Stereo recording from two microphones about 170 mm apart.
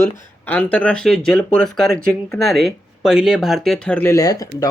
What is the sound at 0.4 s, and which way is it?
Speech, 10° left (ahead or behind).